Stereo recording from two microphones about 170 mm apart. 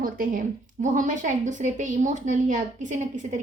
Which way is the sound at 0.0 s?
55° right (ahead or behind).